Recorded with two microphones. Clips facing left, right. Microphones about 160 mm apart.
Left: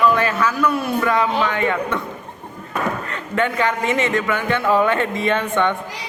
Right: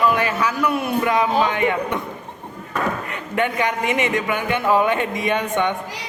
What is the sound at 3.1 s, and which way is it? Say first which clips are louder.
A man's voice: left 1 dB; 15° right (ahead or behind).